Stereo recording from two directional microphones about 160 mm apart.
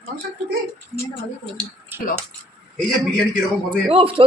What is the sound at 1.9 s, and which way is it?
Speech, 15° right (ahead or behind).